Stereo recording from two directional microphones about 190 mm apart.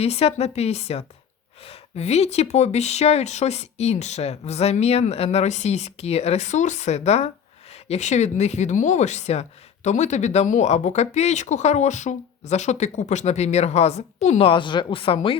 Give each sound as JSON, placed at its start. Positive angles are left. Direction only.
{"t": 0.0, "sound": "speech", "side_deg": 30}